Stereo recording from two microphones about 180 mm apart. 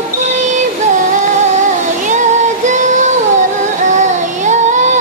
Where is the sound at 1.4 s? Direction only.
40° right (ahead or behind).